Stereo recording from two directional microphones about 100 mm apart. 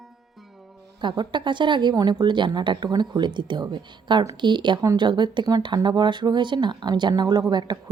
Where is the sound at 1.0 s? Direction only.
50° right (ahead or behind).